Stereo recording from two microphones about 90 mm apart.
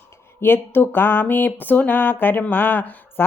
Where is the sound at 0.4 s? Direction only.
25° left (ahead or behind).